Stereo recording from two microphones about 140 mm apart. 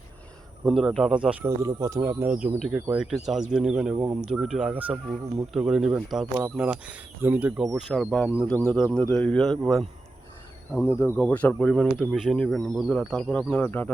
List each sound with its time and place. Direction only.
0.6 s speech: centre (ahead or behind)
1.6 s speech: 25° right (ahead or behind)
2.2 s speech: 10° right (ahead or behind)
3.0 s speech: centre (ahead or behind)
10.8 s speech: 20° left (ahead or behind)